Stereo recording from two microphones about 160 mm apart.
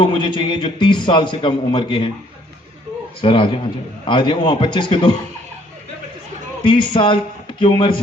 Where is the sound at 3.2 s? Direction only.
30° left (ahead or behind).